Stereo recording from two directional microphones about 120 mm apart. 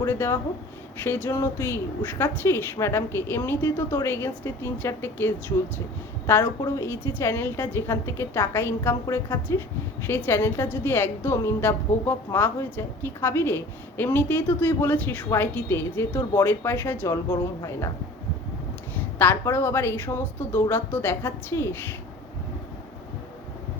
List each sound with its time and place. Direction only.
0.0 s a woman's voice: 20° left (ahead or behind)
19.2 s a woman's voice: 20° left (ahead or behind)